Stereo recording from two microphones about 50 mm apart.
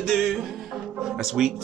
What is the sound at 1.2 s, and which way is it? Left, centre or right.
Speech, centre.